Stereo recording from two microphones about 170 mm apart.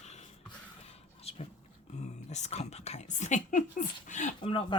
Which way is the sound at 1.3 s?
35° left (ahead or behind).